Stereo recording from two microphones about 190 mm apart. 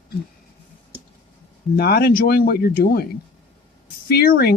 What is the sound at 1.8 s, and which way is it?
Speech, 55° left (ahead or behind).